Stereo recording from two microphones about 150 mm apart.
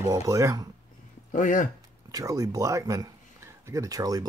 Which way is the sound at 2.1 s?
25° right (ahead or behind).